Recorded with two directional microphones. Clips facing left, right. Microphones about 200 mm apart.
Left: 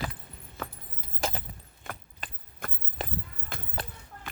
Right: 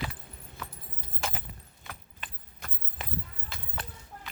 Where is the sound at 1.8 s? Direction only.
50° left (ahead or behind).